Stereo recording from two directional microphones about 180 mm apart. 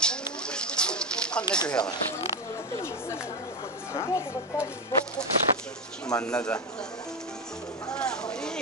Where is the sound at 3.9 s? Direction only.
15° left (ahead or behind).